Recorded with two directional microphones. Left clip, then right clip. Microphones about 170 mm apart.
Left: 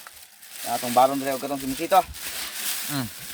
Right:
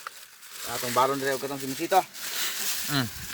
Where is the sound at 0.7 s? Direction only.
85° left.